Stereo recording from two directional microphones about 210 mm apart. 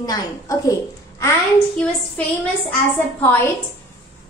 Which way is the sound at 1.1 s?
5° left (ahead or behind).